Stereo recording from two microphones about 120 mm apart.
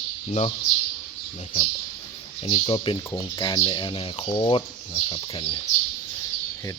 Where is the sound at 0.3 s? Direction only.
65° left (ahead or behind).